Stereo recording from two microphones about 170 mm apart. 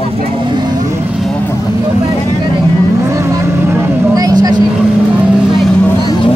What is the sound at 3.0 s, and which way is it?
Vehicle, 15° right (ahead or behind).